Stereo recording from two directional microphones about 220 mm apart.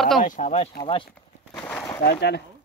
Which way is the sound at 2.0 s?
50° left (ahead or behind).